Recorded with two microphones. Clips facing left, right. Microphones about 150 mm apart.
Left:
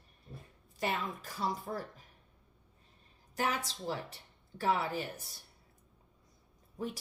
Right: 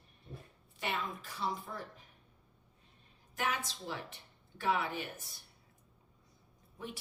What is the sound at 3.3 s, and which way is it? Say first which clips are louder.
Speech: left 2 dB; 35° left (ahead or behind).